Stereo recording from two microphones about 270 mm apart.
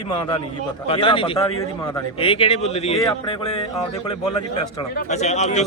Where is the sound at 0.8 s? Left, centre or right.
Centre.